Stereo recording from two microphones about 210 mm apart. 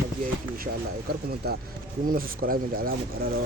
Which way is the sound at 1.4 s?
50° right (ahead or behind).